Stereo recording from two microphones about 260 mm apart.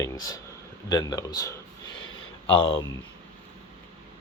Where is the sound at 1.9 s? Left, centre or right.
Left.